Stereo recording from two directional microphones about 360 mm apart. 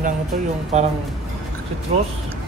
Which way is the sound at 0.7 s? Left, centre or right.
Centre.